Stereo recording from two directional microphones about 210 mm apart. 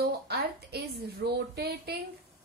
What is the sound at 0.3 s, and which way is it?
A woman's voice, 50° right (ahead or behind).